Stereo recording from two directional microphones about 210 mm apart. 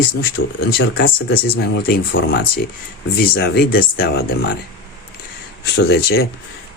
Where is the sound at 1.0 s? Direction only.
45° left (ahead or behind).